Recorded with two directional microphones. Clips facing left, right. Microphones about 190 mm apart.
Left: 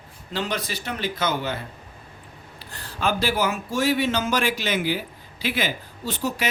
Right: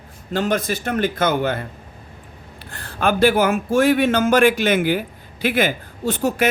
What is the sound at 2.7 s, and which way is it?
Speech, 55° right (ahead or behind).